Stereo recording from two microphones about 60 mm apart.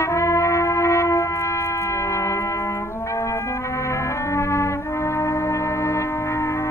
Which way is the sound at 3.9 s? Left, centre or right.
Left.